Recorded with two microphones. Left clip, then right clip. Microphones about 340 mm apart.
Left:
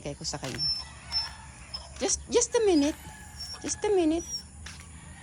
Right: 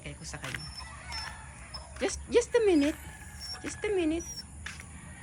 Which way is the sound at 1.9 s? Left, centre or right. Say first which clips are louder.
Left 1 dB; centre.